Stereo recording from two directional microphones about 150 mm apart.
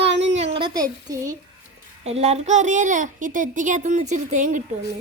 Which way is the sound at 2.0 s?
45° right (ahead or behind).